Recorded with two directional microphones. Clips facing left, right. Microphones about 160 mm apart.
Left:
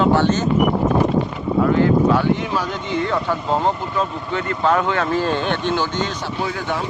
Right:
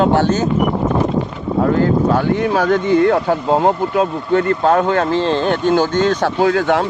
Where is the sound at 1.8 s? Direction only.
50° right (ahead or behind).